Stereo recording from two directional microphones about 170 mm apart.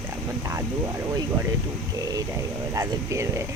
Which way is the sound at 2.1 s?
20° right (ahead or behind).